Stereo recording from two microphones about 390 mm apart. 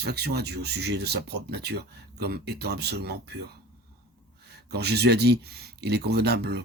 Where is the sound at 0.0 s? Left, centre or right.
Right.